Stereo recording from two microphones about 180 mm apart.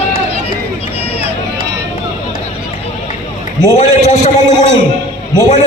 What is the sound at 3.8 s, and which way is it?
Speech, 40° left (ahead or behind).